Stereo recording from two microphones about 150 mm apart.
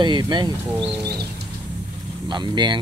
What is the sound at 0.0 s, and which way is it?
Speech, 30° right (ahead or behind).